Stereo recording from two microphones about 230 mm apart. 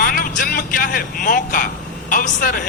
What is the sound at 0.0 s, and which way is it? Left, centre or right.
A man's voice, left.